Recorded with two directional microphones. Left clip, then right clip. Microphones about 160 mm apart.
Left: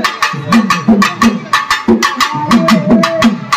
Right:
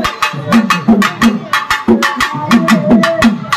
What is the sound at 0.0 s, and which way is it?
Music, 10° right (ahead or behind).